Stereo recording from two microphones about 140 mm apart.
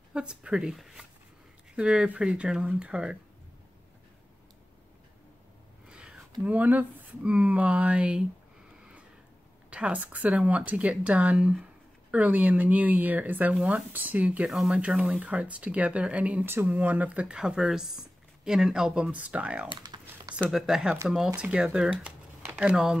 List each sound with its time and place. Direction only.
0.1 s speech: 5° right (ahead or behind)
5.9 s a sound: 5° right (ahead or behind)
6.4 s speech: 10° right (ahead or behind)
9.7 s speech: 10° right (ahead or behind)
19.7 s typing: 30° right (ahead or behind)
20.4 s speech: 5° right (ahead or behind)